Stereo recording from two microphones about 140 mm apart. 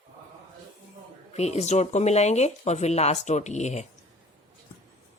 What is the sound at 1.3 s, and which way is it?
Speech, 50° left (ahead or behind).